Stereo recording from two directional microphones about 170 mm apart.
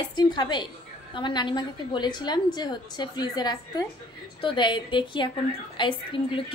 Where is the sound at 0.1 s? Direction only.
25° left (ahead or behind).